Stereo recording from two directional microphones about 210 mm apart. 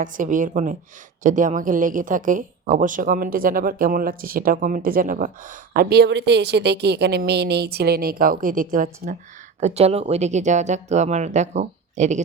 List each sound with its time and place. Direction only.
0.0 s a woman's voice: 40° right (ahead or behind)